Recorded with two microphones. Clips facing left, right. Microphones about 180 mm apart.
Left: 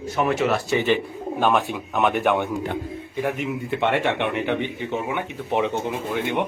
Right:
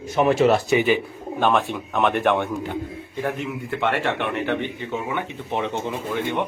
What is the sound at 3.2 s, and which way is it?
Speech, 15° left (ahead or behind).